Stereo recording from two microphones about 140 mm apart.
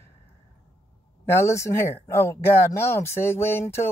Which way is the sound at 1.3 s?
20° left (ahead or behind).